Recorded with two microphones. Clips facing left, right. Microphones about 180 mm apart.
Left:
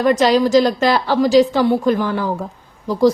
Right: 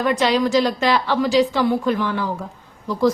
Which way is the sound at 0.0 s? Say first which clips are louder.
Left 5 dB; 40° left (ahead or behind).